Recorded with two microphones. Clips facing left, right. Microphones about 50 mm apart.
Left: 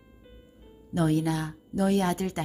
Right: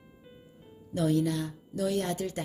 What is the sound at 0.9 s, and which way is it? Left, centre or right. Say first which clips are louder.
A woman's voice: left 2 dB; left.